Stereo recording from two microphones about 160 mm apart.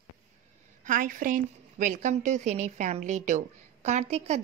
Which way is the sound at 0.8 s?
55° right (ahead or behind).